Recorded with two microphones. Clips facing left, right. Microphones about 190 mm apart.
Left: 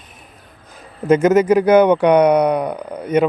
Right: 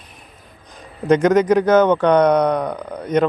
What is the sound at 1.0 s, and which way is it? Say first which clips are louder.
Speech: left 1 dB; 5° left (ahead or behind).